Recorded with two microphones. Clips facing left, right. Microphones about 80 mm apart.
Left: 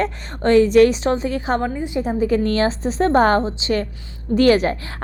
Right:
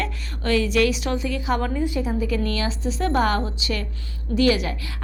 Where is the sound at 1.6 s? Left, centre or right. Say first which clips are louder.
Left 2 dB; left.